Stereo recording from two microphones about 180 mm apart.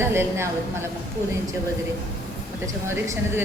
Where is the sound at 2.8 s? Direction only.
15° right (ahead or behind).